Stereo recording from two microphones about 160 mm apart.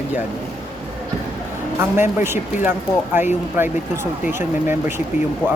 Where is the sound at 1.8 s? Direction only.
15° right (ahead or behind).